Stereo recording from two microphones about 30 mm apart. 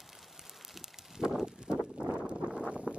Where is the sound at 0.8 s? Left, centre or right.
Centre.